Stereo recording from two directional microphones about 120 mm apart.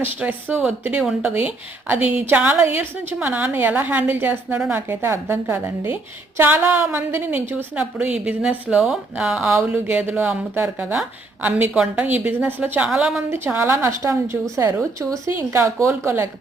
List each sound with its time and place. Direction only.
0.0 s a woman's voice: 15° right (ahead or behind)
9.5 s a woman's voice: 20° right (ahead or behind)
13.3 s a woman's voice: 20° right (ahead or behind)